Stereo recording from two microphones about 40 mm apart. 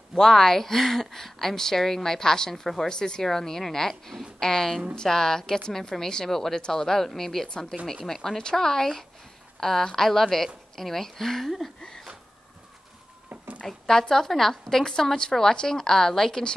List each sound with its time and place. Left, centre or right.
0.2 s a woman's voice: centre
13.3 s a sound: right
13.7 s a woman's voice: centre